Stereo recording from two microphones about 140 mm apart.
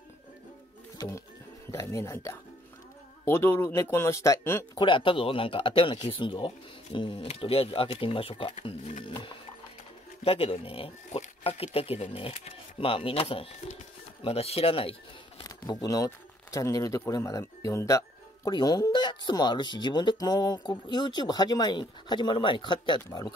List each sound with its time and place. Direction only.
0.9 s music: 20° left (ahead or behind)
1.7 s speech: 20° left (ahead or behind)
4.7 s speech: 35° left (ahead or behind)
10.2 s speech: 45° left (ahead or behind)
15.4 s speech: 25° left (ahead or behind)